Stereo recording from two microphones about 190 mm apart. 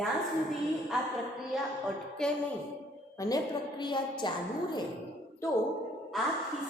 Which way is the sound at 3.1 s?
20° left (ahead or behind).